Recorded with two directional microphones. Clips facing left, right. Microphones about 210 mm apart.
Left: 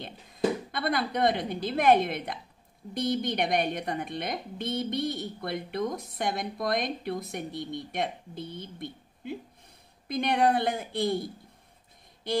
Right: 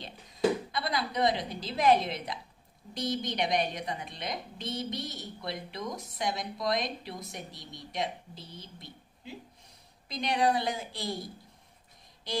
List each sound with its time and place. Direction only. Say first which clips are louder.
0.7 s speech: left 4 dB; 55° left (ahead or behind)
12.2 s speech: left 5 dB; 55° left (ahead or behind)